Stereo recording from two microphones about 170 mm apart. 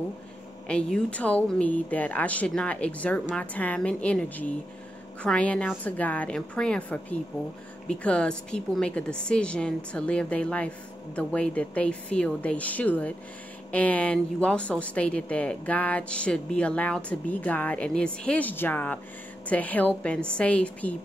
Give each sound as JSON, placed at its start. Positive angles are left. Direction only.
{"t": 0.7, "sound": "a woman's voice", "side_deg": 5}